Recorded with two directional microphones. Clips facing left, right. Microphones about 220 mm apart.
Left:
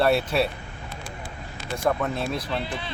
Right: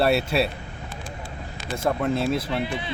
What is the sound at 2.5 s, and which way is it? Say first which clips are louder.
Speech: right 3 dB; 15° right (ahead or behind).